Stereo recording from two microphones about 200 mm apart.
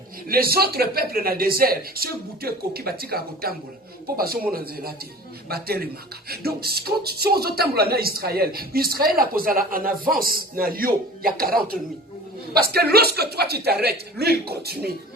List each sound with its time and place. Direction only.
0.3 s speech: 50° right (ahead or behind)